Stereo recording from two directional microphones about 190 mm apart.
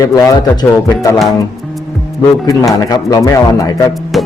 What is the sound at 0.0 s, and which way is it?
Speech, 15° left (ahead or behind).